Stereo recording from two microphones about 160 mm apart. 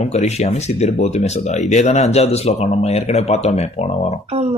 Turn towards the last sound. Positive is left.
turn(degrees=-40)  # may be behind; listen again after turning